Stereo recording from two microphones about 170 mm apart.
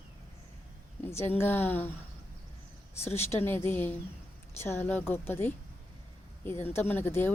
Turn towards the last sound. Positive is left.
turn(degrees=10)  # may be behind; listen again after turning